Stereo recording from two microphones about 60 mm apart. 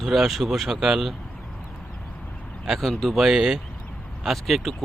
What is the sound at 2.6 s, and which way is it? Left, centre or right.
Speech, centre.